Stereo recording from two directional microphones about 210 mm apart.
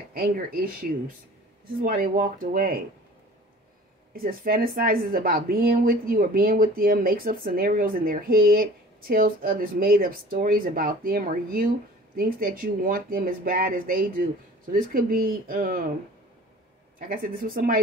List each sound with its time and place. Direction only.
0.1 s speech: 45° right (ahead or behind)
4.1 s speech: 45° right (ahead or behind)
17.1 s speech: 45° right (ahead or behind)